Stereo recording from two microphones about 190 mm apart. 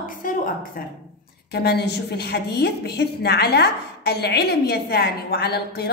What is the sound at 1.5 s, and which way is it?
A woman's voice, 60° left (ahead or behind).